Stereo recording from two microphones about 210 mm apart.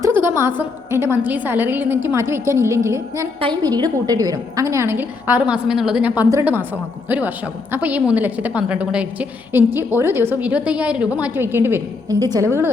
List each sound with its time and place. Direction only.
0.0 s a woman's voice: 10° right (ahead or behind)